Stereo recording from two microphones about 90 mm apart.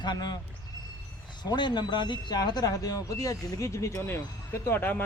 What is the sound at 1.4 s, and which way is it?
Speech, 55° left (ahead or behind).